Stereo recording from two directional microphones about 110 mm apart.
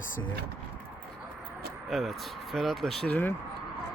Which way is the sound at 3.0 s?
15° left (ahead or behind).